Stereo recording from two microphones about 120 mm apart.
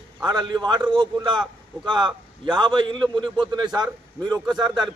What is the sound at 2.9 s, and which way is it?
Speech, 5° left (ahead or behind).